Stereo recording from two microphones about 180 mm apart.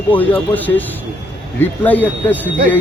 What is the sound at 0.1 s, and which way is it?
Speech, 10° left (ahead or behind).